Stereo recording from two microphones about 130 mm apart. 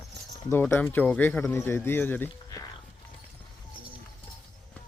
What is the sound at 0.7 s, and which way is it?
Speech, 15° left (ahead or behind).